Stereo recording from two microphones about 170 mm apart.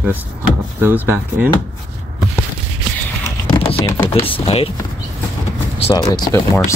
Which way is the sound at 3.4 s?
35° left (ahead or behind).